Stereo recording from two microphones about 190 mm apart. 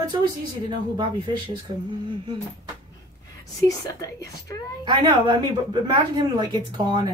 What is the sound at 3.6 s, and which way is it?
Speech, 20° left (ahead or behind).